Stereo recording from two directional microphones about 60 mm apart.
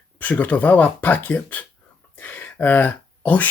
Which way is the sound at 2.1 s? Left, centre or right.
Left.